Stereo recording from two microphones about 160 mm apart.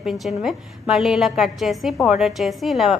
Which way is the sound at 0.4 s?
Centre (ahead or behind).